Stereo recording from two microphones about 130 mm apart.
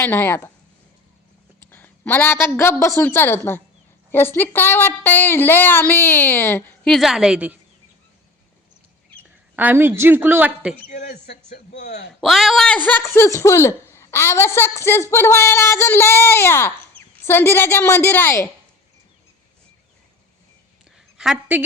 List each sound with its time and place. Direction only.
0.0 s a woman's voice: 15° left (ahead or behind)
1.6 s a woman's voice: 15° left (ahead or behind)
6.8 s a woman's voice: centre (ahead or behind)
9.6 s a woman's voice: 15° right (ahead or behind)
10.8 s a man's voice: 65° left (ahead or behind)
12.2 s a woman's voice: centre (ahead or behind); by 18.4 s 15° left (ahead or behind)